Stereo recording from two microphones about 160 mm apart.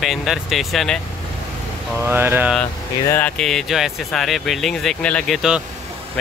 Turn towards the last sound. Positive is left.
turn(degrees=0)  # may be behind; listen again after turning